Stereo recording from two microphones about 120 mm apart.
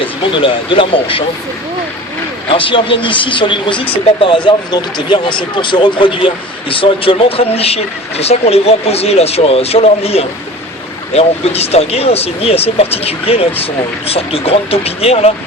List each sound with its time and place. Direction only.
0.0 s speech: 45° left (ahead or behind)
2.5 s speech: 45° left (ahead or behind)